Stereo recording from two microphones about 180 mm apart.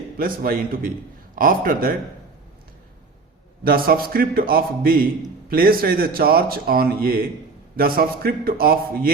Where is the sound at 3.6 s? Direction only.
55° right (ahead or behind).